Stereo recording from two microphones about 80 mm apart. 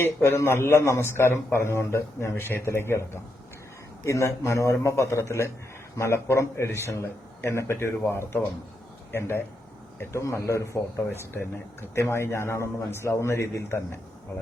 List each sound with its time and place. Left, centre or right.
0.0 s speech: left